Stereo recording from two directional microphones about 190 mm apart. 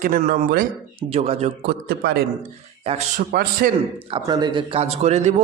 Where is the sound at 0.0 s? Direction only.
50° right (ahead or behind).